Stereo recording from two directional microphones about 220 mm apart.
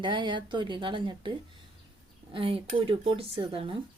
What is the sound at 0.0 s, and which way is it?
Speech, 20° right (ahead or behind).